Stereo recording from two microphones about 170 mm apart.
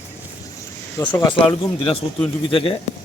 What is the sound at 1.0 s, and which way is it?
Speech, 15° left (ahead or behind).